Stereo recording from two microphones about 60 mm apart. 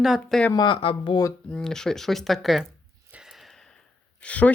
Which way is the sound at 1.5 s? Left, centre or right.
Centre.